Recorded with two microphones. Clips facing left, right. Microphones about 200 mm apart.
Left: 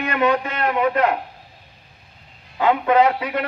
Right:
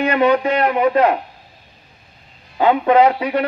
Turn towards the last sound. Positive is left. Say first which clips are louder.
# right 4 dB
turn(degrees=-30)  # may be behind; listen again after turning